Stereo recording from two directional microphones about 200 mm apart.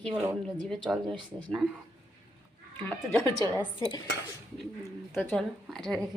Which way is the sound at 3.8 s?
20° left (ahead or behind).